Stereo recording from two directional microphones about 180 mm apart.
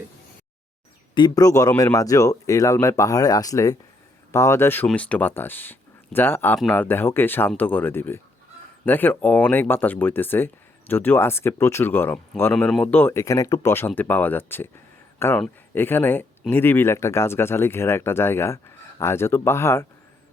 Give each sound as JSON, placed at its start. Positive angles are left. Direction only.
{"t": 1.1, "sound": "speech", "side_deg": 20}